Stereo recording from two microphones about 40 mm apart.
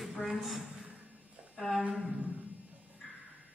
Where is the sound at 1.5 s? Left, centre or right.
Centre.